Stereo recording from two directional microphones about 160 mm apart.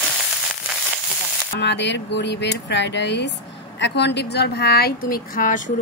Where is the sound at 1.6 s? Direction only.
90° left.